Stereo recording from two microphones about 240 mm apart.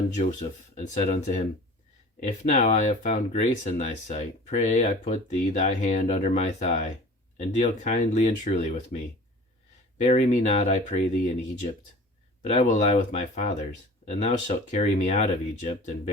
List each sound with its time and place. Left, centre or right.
0.2 s speech: left
2.4 s speech: left
10.0 s speech: left
12.4 s speech: left